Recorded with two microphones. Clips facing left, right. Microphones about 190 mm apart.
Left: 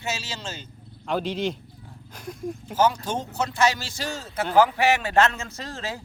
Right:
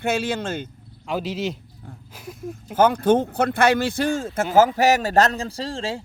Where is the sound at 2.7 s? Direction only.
55° right (ahead or behind).